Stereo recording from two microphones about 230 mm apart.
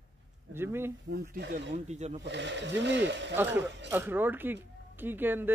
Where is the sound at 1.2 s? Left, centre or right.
Right.